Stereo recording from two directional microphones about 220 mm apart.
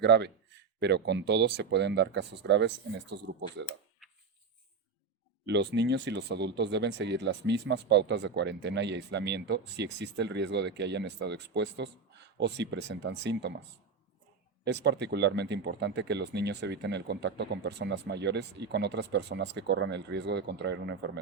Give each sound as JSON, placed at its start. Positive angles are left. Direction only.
{"t": 0.0, "sound": "speech", "side_deg": -50}
{"t": 5.5, "sound": "speech", "side_deg": -50}
{"t": 14.6, "sound": "speech", "side_deg": -50}